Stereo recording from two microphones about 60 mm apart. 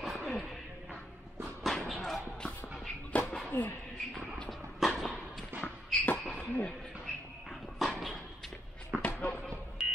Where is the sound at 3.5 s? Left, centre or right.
Left.